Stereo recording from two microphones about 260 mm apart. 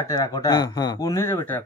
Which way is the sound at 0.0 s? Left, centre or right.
Centre.